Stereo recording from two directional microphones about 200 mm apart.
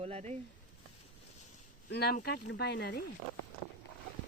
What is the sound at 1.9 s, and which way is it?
Speech, 55° left (ahead or behind).